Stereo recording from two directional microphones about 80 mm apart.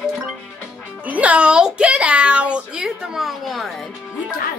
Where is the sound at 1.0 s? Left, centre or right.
Centre.